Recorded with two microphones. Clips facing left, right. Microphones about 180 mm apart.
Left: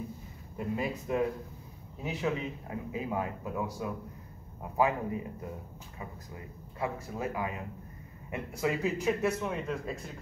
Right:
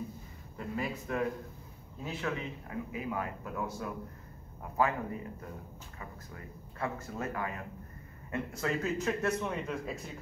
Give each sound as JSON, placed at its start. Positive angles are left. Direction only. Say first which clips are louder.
{"t": 0.6, "sound": "speech", "louder": "left 3 dB", "side_deg": 20}
{"t": 4.7, "sound": "speech", "louder": "left 2 dB", "side_deg": 20}